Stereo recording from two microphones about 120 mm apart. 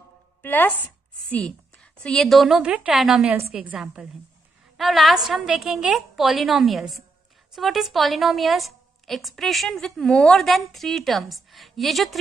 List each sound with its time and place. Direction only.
0.4 s a woman's voice: 15° left (ahead or behind); by 12.2 s centre (ahead or behind)